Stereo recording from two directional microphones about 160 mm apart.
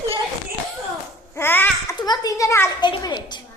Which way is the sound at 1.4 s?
15° left (ahead or behind).